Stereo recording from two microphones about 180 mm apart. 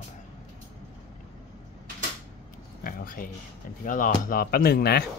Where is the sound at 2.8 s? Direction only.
50° left (ahead or behind).